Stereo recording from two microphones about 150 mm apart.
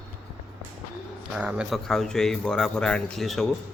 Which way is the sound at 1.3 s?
5° right (ahead or behind).